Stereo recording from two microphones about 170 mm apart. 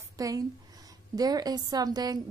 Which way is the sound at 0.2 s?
20° right (ahead or behind).